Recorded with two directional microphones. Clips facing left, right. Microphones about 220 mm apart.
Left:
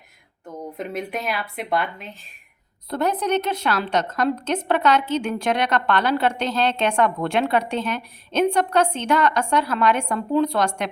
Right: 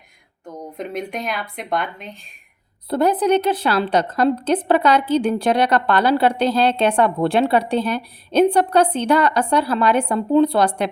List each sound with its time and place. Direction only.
0.4 s speech: 5° left (ahead or behind)
2.9 s a woman's voice: 30° right (ahead or behind)